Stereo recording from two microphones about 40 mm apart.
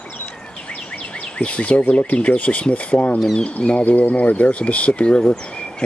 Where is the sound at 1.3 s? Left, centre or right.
Left.